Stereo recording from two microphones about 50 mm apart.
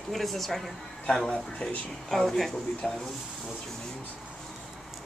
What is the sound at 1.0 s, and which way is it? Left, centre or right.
Speech, centre.